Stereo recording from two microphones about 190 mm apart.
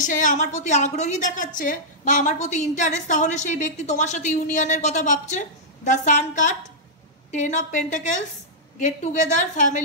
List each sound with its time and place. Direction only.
0.0 s a woman's voice: 40° left (ahead or behind)